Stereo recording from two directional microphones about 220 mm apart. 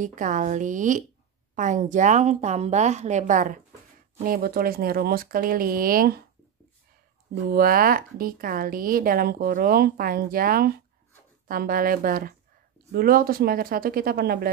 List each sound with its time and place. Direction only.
0.0 s speech: 35° right (ahead or behind)
7.4 s speech: 40° right (ahead or behind)